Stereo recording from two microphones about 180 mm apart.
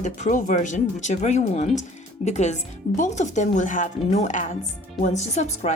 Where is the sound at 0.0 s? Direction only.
45° left (ahead or behind).